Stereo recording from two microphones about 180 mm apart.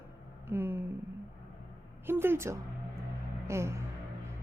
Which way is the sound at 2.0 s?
10° right (ahead or behind).